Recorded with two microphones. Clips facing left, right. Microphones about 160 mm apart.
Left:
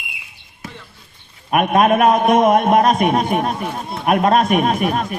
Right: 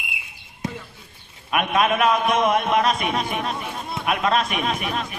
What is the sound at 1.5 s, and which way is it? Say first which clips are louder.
A man's voice: left 6 dB; 45° left (ahead or behind).